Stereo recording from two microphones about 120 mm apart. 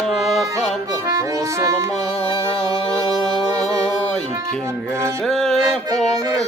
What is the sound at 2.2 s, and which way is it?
Music, 50° left (ahead or behind).